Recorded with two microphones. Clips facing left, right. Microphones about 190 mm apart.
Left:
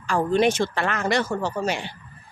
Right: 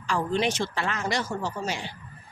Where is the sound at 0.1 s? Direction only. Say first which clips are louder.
Left 6 dB; 50° left (ahead or behind).